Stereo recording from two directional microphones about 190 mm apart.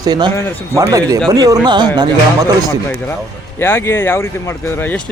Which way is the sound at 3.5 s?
10° left (ahead or behind).